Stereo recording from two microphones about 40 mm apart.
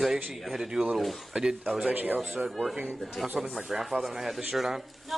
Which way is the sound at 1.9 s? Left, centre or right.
Right.